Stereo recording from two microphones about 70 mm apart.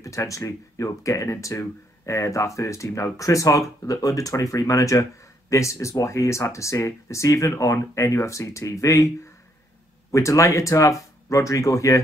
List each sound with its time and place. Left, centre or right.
0.0 s speech: left
10.1 s speech: left